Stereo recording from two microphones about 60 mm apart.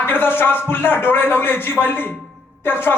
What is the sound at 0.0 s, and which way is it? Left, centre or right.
A man's voice, left.